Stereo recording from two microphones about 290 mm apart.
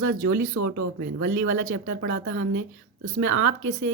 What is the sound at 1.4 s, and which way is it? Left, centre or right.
Speech, right.